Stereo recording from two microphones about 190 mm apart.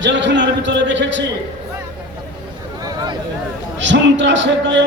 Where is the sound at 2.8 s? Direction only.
20° right (ahead or behind).